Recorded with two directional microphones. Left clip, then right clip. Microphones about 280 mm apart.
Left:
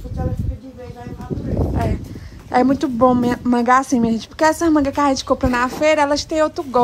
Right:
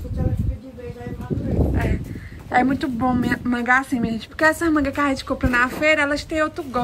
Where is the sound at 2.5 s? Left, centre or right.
Centre.